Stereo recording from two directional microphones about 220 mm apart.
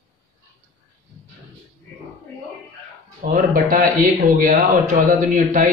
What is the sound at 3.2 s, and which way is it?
Speech, 35° right (ahead or behind).